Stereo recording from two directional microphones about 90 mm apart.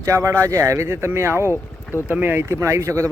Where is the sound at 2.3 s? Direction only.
30° right (ahead or behind).